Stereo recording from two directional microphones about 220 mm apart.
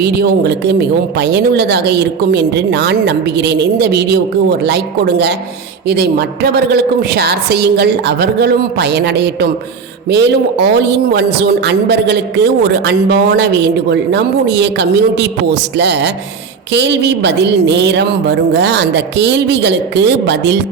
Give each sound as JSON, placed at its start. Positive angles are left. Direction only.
{"t": 0.0, "sound": "speech", "side_deg": -50}